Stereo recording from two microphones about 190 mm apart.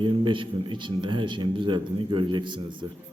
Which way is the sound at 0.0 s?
25° right (ahead or behind).